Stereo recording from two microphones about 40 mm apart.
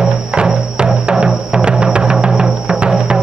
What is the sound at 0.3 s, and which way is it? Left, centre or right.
Music, right.